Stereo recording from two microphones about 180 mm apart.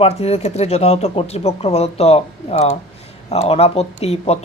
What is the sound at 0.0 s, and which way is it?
A man's voice, 35° left (ahead or behind).